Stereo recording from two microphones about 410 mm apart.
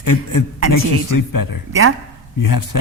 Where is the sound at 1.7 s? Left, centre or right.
Right.